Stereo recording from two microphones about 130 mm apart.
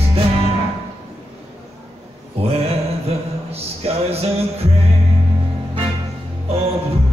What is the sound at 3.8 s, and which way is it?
Music, 50° right (ahead or behind).